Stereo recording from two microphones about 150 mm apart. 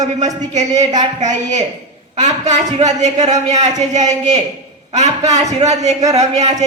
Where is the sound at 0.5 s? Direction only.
50° right (ahead or behind).